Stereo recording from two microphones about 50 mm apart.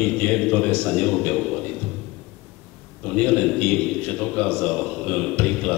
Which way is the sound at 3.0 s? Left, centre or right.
Centre.